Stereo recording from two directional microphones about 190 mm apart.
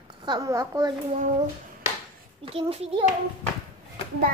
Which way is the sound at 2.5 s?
30° right (ahead or behind).